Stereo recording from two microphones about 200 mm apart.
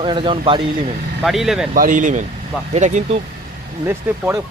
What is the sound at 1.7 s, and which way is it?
Speech, 40° right (ahead or behind).